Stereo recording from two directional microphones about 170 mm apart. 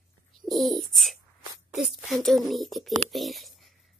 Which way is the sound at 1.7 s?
Centre (ahead or behind).